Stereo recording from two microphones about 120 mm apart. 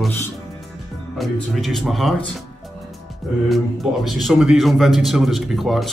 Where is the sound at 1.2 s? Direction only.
Centre (ahead or behind).